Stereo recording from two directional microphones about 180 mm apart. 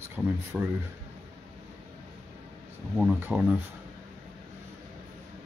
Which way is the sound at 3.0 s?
10° right (ahead or behind).